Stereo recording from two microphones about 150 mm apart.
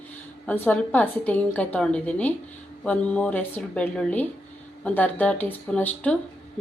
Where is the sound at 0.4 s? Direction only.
10° left (ahead or behind).